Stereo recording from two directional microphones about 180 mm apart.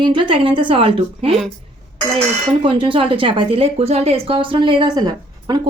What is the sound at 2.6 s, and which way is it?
A woman's voice, 30° right (ahead or behind).